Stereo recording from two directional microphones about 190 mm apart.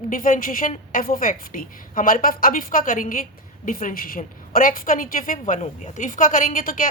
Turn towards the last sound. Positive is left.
turn(degrees=45)  # may be behind; listen again after turning